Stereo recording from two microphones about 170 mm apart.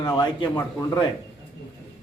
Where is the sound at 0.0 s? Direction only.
25° left (ahead or behind).